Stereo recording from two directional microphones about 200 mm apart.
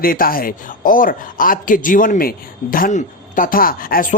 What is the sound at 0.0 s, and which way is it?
Speech, 45° left (ahead or behind).